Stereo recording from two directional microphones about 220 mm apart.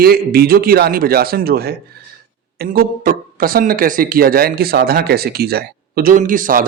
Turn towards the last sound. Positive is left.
turn(degrees=-40)  # may be behind; listen again after turning